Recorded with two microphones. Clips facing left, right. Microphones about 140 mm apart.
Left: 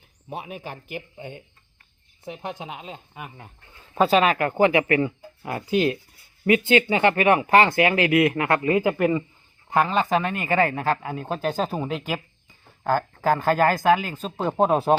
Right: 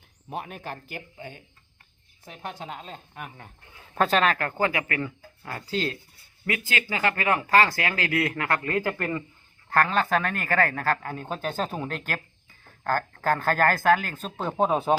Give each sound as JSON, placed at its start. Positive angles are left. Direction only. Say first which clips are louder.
{"t": 0.3, "sound": "speech", "louder": "left 1 dB", "side_deg": 5}